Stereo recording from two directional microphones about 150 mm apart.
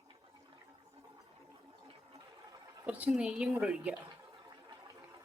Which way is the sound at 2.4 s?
25° right (ahead or behind).